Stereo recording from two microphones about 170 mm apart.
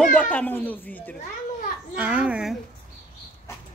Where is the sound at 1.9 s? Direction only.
10° right (ahead or behind).